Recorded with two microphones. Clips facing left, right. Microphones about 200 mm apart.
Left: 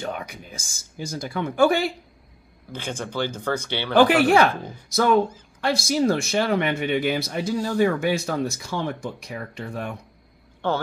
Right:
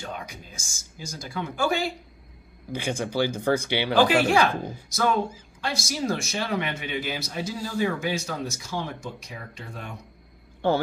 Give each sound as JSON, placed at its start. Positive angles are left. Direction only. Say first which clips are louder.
{"t": 0.0, "sound": "speech", "louder": "left 5 dB", "side_deg": 60}
{"t": 2.7, "sound": "speech", "louder": "right 3 dB", "side_deg": -10}
{"t": 3.9, "sound": "speech", "louder": "left 4 dB", "side_deg": 60}
{"t": 5.6, "sound": "speech", "louder": "left 8 dB", "side_deg": 55}